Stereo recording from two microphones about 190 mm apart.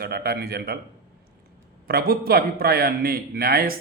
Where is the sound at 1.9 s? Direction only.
50° right (ahead or behind).